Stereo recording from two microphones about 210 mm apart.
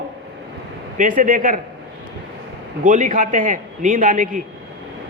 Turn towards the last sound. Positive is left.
turn(degrees=-40)  # may be behind; listen again after turning